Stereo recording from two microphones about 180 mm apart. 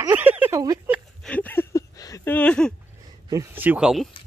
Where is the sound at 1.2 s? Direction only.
10° left (ahead or behind).